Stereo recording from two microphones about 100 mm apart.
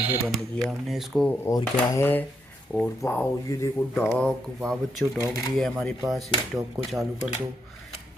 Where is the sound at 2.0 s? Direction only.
20° left (ahead or behind).